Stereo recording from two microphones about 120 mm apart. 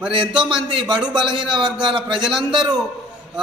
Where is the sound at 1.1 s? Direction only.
40° right (ahead or behind).